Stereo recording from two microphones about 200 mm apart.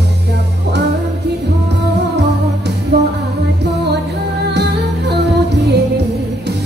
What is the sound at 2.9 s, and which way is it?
Music, 55° right (ahead or behind).